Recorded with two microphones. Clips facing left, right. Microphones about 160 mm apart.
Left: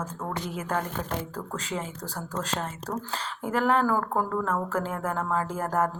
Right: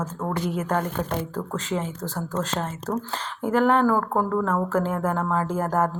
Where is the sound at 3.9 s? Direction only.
25° right (ahead or behind).